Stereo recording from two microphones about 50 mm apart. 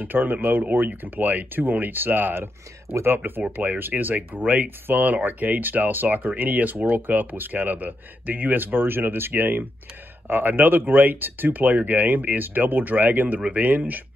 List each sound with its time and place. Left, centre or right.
0.0 s speech: right
3.5 s speech: right